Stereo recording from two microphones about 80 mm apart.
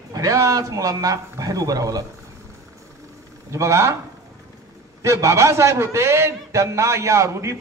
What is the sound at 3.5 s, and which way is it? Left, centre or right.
Speech, right.